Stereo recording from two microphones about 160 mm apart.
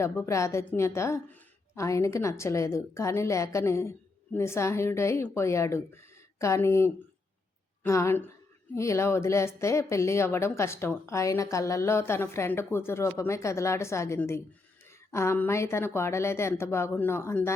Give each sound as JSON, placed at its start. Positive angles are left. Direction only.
{"t": 0.0, "sound": "a woman's voice", "side_deg": 20}